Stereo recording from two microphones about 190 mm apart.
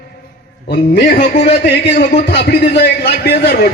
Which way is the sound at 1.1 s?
55° left (ahead or behind).